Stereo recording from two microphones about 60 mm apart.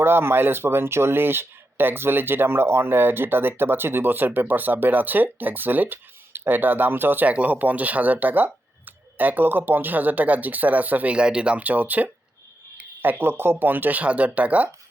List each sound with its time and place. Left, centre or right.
0.0 s speech: right